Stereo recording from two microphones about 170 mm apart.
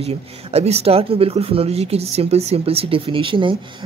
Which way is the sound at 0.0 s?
35° right (ahead or behind).